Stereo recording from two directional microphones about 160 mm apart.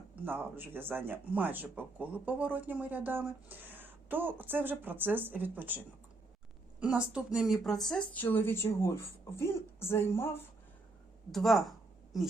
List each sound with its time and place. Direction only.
0.3 s speech: 15° right (ahead or behind); by 10.2 s 15° left (ahead or behind)
11.3 s speech: centre (ahead or behind)